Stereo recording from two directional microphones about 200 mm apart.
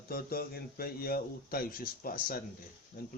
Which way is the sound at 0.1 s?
50° left (ahead or behind).